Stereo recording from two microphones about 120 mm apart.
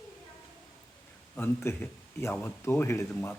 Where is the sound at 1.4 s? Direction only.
20° left (ahead or behind).